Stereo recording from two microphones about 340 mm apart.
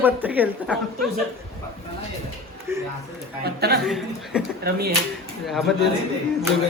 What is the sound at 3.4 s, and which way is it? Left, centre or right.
Speech, right.